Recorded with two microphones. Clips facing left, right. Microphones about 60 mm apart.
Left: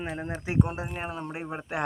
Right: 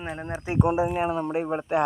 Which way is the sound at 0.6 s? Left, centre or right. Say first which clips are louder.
Right 11 dB; centre.